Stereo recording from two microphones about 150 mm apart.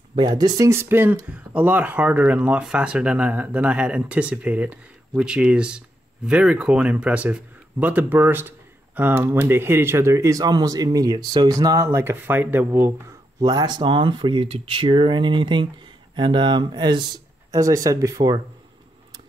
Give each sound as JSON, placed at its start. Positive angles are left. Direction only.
{"t": 0.1, "sound": "speech", "side_deg": -30}
{"t": 13.4, "sound": "speech", "side_deg": -25}